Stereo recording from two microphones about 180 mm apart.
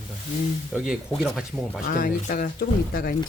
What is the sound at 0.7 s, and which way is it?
Speech, 5° right (ahead or behind).